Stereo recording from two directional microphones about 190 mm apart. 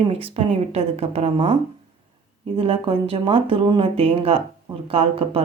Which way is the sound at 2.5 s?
30° right (ahead or behind).